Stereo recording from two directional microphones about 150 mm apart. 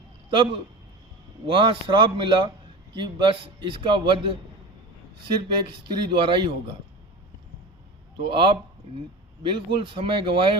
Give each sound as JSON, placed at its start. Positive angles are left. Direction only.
{"t": 0.3, "sound": "a man's voice", "side_deg": -35}
{"t": 5.6, "sound": "a man's voice", "side_deg": -35}
{"t": 8.2, "sound": "a man's voice", "side_deg": -35}